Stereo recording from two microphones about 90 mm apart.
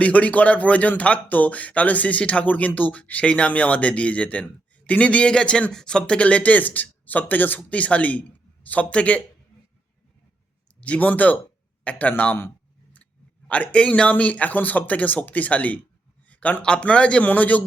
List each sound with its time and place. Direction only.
0.0 s speech: 15° left (ahead or behind)
10.8 s speech: 15° left (ahead or behind)
13.5 s speech: 15° left (ahead or behind)